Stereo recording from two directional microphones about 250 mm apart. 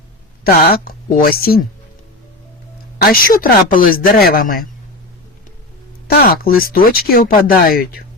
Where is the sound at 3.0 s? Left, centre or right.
Left.